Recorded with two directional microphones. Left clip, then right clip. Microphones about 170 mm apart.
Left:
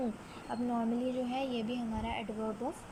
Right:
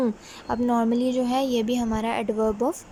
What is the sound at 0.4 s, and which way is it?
A woman's voice, 35° right (ahead or behind).